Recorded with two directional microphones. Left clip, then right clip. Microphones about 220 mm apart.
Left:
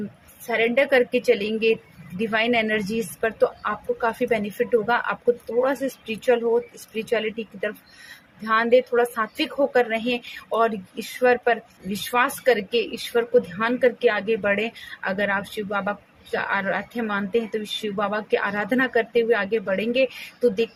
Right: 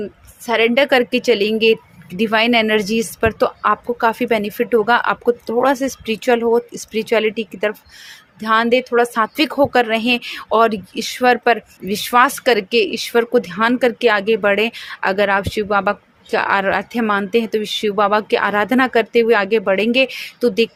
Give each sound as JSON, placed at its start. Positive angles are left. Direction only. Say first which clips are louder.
{"t": 0.4, "sound": "speech", "louder": "right 6 dB", "side_deg": -40}